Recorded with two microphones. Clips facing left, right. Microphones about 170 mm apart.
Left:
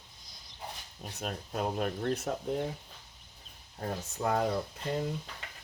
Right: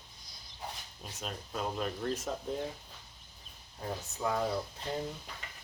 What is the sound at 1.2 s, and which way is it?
Speech, 50° left (ahead or behind).